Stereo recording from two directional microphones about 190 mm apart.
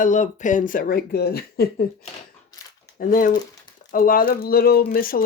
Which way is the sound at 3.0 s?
45° left (ahead or behind).